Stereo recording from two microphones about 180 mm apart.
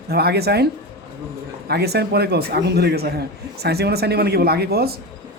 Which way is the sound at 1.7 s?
65° right (ahead or behind).